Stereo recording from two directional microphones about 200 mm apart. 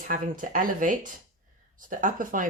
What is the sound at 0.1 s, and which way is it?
A woman's voice, 40° right (ahead or behind).